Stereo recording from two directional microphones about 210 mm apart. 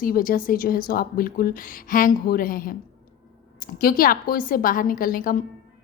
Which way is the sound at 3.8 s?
45° left (ahead or behind).